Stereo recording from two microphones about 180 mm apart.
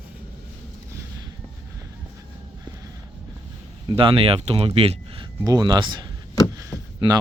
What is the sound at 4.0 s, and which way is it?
Speech, 30° right (ahead or behind).